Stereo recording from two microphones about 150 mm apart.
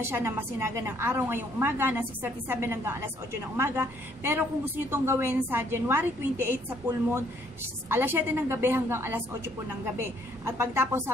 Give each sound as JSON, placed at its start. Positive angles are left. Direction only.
{"t": 0.0, "sound": "a woman's voice", "side_deg": -15}